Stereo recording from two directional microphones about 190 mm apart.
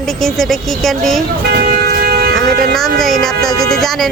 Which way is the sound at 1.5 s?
50° right (ahead or behind).